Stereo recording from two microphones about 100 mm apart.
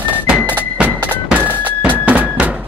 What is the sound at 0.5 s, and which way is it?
Music, 15° right (ahead or behind).